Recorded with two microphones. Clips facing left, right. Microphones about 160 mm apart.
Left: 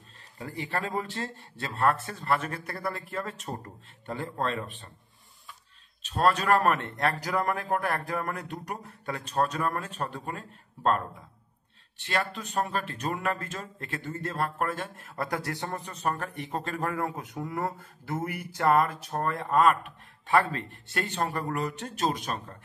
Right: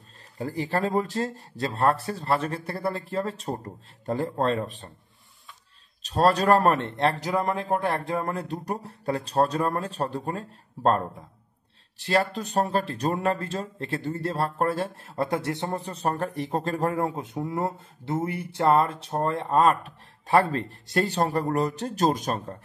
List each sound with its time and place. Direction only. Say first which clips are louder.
0.4 s speech: right 6 dB; 35° right (ahead or behind)
6.0 s speech: right 4 dB; 35° right (ahead or behind)